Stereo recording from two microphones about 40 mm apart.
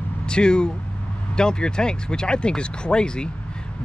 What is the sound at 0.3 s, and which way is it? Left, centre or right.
Speech, left.